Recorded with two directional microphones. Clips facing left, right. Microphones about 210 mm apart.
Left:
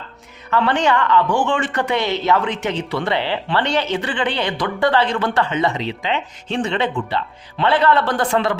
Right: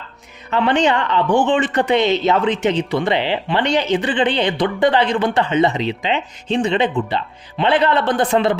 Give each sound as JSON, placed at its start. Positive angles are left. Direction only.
{"t": 0.5, "sound": "speech", "side_deg": -15}